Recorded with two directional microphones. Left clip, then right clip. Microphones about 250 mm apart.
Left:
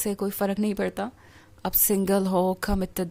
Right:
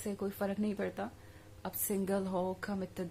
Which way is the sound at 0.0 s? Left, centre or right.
Left.